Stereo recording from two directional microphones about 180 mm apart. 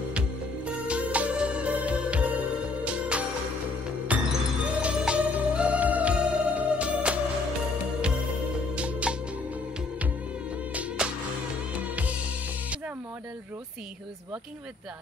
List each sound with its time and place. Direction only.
0.7 s music: 5° right (ahead or behind)
8.7 s music: 5° right (ahead or behind)
10.7 s music: 10° right (ahead or behind)